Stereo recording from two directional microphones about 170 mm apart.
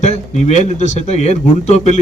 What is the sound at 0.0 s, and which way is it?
A man's voice, 45° left (ahead or behind).